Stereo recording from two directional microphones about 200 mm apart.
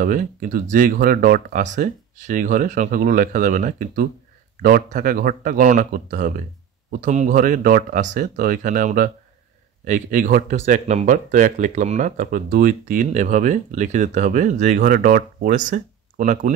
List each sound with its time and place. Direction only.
0.0 s speech: 45° right (ahead or behind)